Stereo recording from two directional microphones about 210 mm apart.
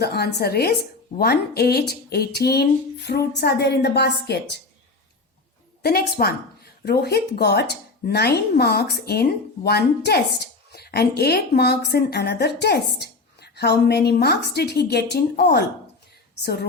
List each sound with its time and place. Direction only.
0.0 s a woman's voice: 50° left (ahead or behind)
5.8 s a woman's voice: 50° left (ahead or behind)